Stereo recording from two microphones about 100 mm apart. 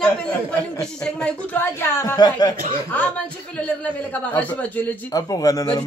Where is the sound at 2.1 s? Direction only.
45° left (ahead or behind).